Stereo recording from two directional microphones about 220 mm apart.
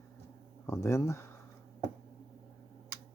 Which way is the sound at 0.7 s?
15° left (ahead or behind).